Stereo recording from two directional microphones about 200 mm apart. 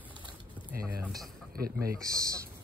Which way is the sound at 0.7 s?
45° right (ahead or behind).